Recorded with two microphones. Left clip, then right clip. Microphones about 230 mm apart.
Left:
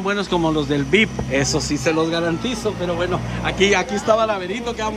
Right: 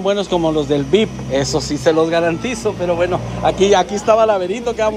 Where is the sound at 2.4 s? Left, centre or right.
Centre.